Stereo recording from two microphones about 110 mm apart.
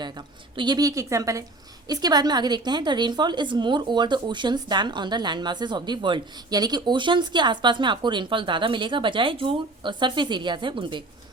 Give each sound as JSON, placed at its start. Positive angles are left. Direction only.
{"t": 0.0, "sound": "a woman's voice", "side_deg": -40}